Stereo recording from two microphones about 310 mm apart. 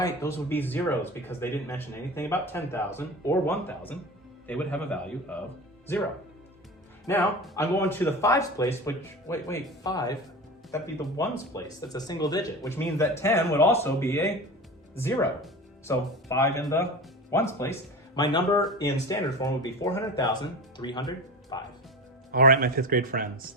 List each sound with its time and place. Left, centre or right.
0.0 s a man's voice: centre
7.1 s speech: centre
22.3 s speech: right